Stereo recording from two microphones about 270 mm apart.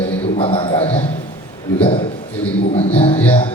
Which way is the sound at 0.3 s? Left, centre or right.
Centre.